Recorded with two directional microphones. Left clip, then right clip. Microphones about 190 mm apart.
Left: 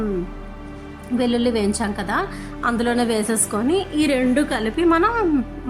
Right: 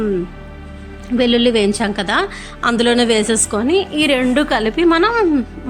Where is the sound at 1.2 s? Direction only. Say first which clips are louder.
Right 7 dB; 10° right (ahead or behind).